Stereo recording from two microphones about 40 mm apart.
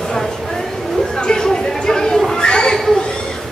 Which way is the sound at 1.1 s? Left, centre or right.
Centre.